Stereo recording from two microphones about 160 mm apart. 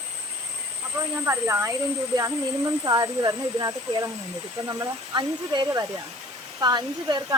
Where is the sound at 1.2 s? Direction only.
15° right (ahead or behind).